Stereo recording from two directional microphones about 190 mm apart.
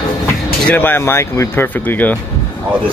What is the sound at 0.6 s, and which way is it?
Speech, 10° left (ahead or behind).